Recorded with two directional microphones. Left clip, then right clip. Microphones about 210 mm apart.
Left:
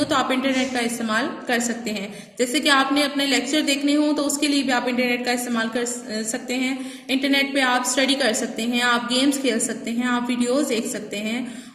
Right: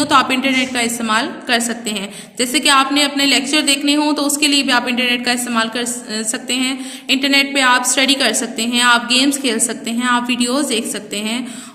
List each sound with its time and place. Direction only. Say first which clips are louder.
0.0 s a woman's voice: right 7 dB; 50° right (ahead or behind)